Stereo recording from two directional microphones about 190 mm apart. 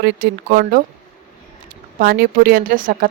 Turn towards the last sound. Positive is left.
turn(degrees=-45)  # may be behind; listen again after turning